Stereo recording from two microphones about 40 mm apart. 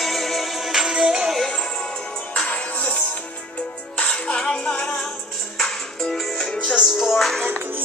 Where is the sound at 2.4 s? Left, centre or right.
Left.